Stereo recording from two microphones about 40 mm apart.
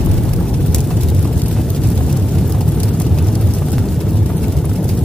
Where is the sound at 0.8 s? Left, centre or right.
Centre.